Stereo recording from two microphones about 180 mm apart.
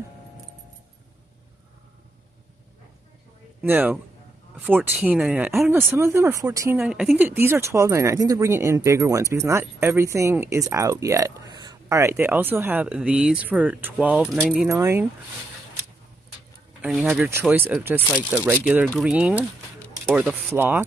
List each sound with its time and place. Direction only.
3.6 s speech: 10° right (ahead or behind)
14.7 s speech: 15° right (ahead or behind)
16.8 s speech: 5° right (ahead or behind)